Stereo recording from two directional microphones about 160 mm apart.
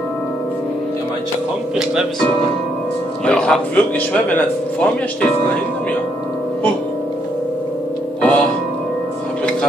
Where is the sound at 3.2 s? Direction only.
5° left (ahead or behind).